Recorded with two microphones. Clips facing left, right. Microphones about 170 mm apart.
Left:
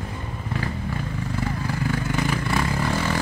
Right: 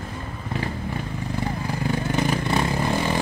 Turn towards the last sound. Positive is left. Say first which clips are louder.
# right 1 dB
turn(degrees=-20)  # may be behind; listen again after turning